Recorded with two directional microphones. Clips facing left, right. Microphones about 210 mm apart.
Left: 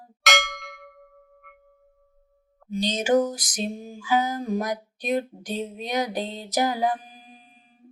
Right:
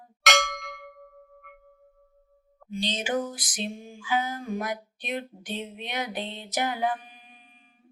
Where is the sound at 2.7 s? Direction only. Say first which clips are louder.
Left 7 dB; 45° left (ahead or behind).